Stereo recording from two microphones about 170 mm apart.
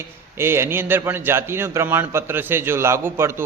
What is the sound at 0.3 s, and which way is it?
A man's voice, 15° right (ahead or behind).